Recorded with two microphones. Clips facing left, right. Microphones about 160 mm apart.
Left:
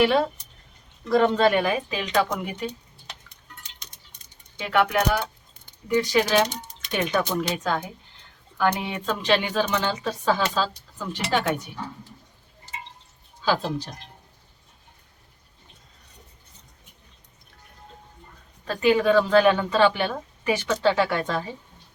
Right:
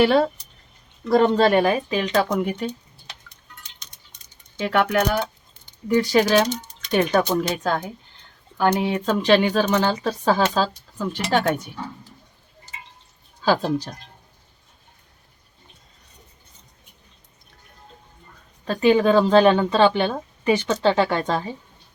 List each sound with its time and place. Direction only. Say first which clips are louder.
1.1 s speech: right 3 dB; 35° right (ahead or behind)
4.5 s speech: right 2 dB; 40° right (ahead or behind)
13.4 s speech: right 4 dB; 45° right (ahead or behind)
18.6 s speech: right 3 dB; 30° right (ahead or behind)